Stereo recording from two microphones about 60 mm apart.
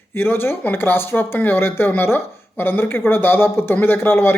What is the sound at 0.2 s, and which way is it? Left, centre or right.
Speech, left.